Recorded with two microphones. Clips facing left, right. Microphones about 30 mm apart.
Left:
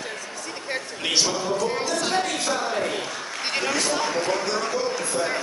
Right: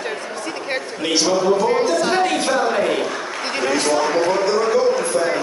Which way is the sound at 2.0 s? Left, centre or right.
Right.